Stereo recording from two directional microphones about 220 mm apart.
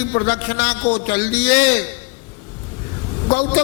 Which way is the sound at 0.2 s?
20° left (ahead or behind).